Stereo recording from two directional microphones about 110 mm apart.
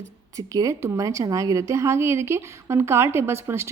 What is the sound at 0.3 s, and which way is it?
A woman's voice, 30° right (ahead or behind).